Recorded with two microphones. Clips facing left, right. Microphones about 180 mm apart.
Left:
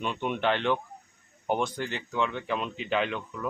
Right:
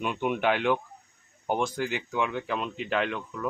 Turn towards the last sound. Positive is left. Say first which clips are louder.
# right 1 dB
turn(degrees=0)  # may be behind; listen again after turning